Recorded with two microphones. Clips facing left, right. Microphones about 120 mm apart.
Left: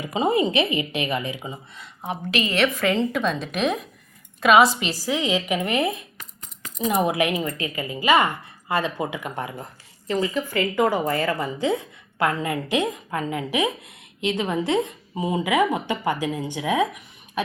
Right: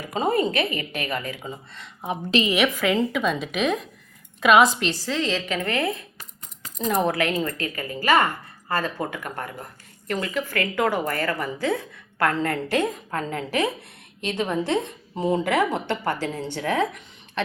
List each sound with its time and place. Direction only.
0.0 s speech: 15° left (ahead or behind)
2.5 s a woman's voice: 5° right (ahead or behind); by 17.4 s 10° left (ahead or behind)